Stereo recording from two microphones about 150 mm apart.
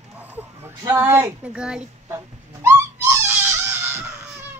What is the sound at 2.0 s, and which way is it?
Dog, 20° right (ahead or behind).